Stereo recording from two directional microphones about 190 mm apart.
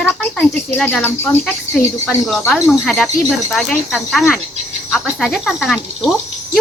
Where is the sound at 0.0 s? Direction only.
10° left (ahead or behind).